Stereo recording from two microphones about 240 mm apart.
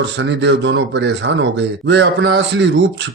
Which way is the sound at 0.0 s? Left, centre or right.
Right.